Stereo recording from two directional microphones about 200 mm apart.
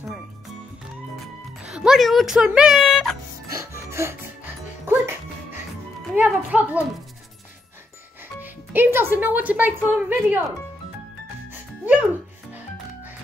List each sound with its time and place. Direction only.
1.6 s speech: 5° right (ahead or behind)
3.4 s music: 15° right (ahead or behind)
6.1 s speech: 10° right (ahead or behind)
8.4 s speech: 10° right (ahead or behind)